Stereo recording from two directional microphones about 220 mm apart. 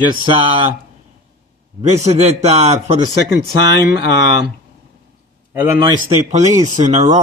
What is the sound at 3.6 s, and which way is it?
Speech, 50° left (ahead or behind).